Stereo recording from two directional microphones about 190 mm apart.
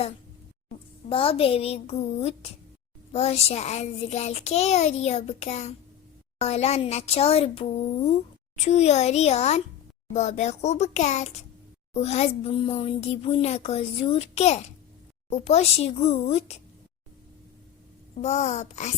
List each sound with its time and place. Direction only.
1.1 s child singing: 30° left (ahead or behind)
18.2 s child singing: 35° left (ahead or behind)